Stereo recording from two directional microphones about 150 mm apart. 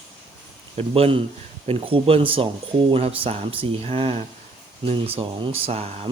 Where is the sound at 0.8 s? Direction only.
40° right (ahead or behind).